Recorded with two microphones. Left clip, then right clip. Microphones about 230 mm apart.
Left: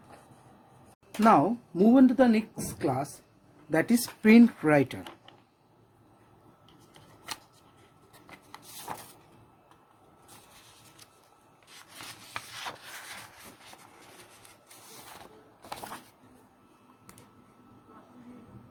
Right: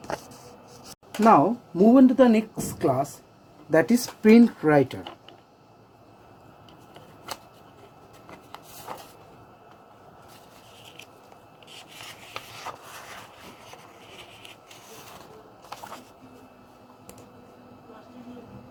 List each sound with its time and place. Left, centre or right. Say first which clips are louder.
1.2 s a woman's voice: right 4 dB; centre